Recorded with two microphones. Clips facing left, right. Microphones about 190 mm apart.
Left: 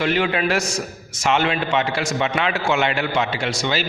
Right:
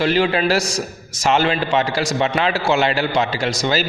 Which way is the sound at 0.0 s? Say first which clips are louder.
Right 3 dB; 35° right (ahead or behind).